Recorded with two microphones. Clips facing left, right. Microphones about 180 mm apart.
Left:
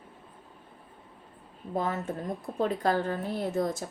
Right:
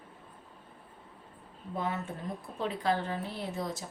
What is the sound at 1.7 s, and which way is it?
A woman's voice, 40° left (ahead or behind).